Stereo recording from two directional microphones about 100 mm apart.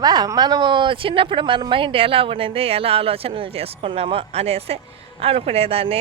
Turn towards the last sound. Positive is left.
turn(degrees=-75)  # may be behind; listen again after turning